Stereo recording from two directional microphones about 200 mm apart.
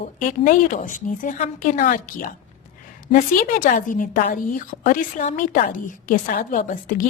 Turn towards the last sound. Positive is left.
turn(degrees=40)  # may be behind; listen again after turning